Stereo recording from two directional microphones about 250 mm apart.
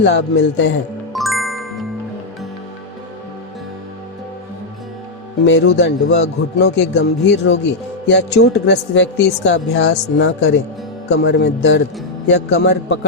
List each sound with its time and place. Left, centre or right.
0.0 s a woman's voice: left
1.1 s music: centre
5.5 s a woman's voice: left